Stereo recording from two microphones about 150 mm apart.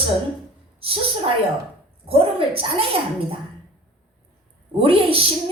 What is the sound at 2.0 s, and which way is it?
Speech, 40° right (ahead or behind).